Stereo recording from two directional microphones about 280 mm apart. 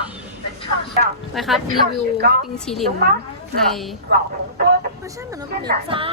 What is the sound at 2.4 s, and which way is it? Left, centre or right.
A woman's voice, centre.